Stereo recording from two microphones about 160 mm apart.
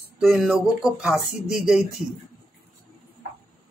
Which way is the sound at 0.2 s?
Centre (ahead or behind).